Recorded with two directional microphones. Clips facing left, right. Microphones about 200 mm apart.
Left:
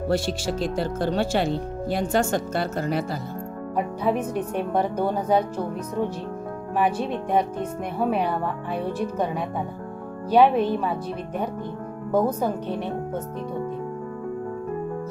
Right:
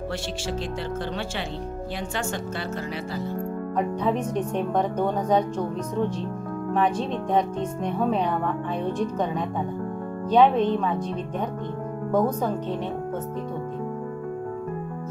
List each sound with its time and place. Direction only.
0.1 s speech: 40° left (ahead or behind)
3.7 s speech: 10° left (ahead or behind)
10.3 s speech: 10° left (ahead or behind)